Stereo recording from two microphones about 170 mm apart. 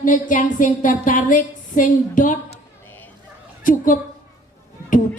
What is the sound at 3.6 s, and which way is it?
Speech, 50° left (ahead or behind).